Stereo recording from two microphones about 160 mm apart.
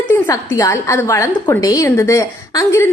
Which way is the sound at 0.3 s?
20° left (ahead or behind).